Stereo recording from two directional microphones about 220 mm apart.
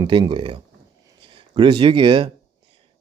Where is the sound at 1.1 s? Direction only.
25° right (ahead or behind).